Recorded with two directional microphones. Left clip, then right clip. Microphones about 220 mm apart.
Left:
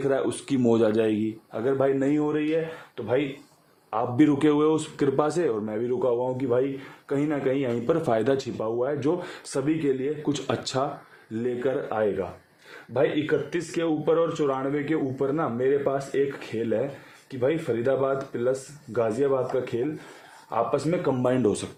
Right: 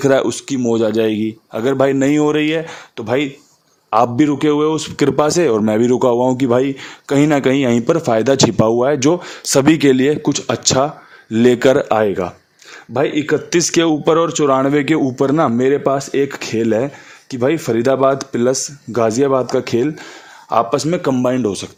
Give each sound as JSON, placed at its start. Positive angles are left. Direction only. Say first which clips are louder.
{"t": 0.0, "sound": "speech", "louder": "right 11 dB", "side_deg": -40}
{"t": 0.3, "sound": "speech", "louder": "right 6 dB", "side_deg": -20}
{"t": 1.6, "sound": "speech", "louder": "right 9 dB", "side_deg": -40}
{"t": 4.2, "sound": "speech", "louder": "right 7 dB", "side_deg": -25}
{"t": 5.7, "sound": "speech", "louder": "right 11 dB", "side_deg": -55}
{"t": 7.9, "sound": "speech", "louder": "right 7 dB", "side_deg": -30}
{"t": 8.5, "sound": "speech", "louder": "right 13 dB", "side_deg": -55}
{"t": 9.2, "sound": "speech", "louder": "right 15 dB", "side_deg": -30}
{"t": 10.2, "sound": "speech", "louder": "right 11 dB", "side_deg": -30}
{"t": 11.3, "sound": "speech", "louder": "right 15 dB", "side_deg": -45}